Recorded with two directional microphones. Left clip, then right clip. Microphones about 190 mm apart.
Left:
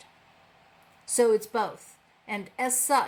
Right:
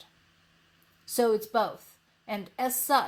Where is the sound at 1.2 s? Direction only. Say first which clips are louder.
Left 2 dB; 40° right (ahead or behind).